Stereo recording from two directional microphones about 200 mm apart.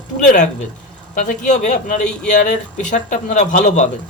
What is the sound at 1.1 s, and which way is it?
Speech, 35° left (ahead or behind).